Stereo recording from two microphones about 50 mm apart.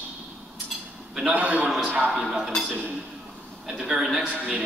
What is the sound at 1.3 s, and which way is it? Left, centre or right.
Speech, right.